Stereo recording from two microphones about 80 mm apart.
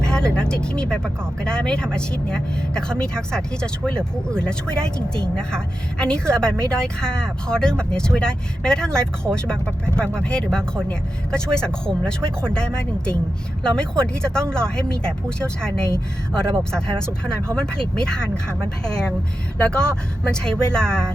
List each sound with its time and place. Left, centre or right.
0.1 s a woman's voice: centre